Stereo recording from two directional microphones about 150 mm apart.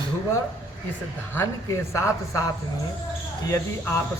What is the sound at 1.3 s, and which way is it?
A man's voice, 15° left (ahead or behind).